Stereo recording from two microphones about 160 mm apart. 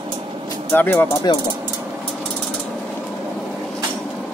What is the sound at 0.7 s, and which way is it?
Speech, 10° left (ahead or behind).